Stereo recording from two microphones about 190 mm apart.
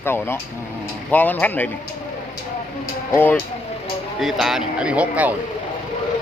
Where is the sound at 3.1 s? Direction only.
10° left (ahead or behind).